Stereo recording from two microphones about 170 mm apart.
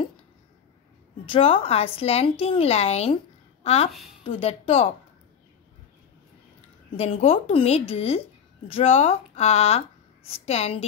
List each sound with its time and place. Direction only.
1.2 s a woman's voice: 30° left (ahead or behind)
7.0 s a woman's voice: 35° left (ahead or behind)